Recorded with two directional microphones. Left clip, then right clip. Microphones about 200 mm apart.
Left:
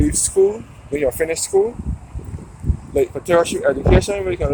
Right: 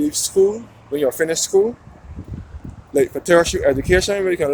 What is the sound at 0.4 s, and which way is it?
Speech, 15° right (ahead or behind).